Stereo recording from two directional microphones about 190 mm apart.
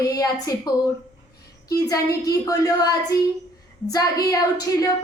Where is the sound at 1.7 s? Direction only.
20° left (ahead or behind).